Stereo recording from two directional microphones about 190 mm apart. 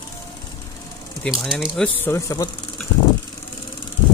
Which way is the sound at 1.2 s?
Centre (ahead or behind).